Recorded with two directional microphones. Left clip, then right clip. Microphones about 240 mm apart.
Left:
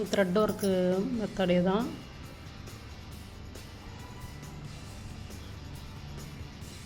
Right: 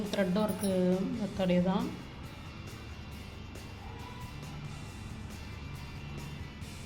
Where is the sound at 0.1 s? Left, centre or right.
Left.